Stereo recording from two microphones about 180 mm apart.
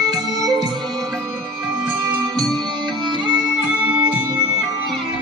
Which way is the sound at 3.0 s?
25° right (ahead or behind).